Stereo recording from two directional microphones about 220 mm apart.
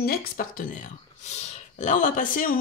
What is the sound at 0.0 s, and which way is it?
Speech, 45° left (ahead or behind).